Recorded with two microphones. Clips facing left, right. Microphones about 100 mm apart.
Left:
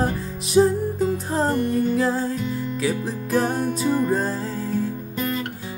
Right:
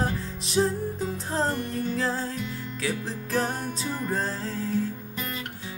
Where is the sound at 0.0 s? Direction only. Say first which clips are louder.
Left 5 dB; 10° left (ahead or behind).